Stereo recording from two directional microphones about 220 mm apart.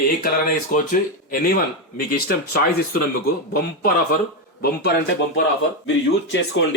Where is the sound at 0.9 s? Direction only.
40° left (ahead or behind).